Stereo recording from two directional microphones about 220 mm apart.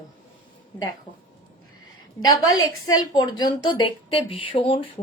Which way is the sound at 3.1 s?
20° left (ahead or behind).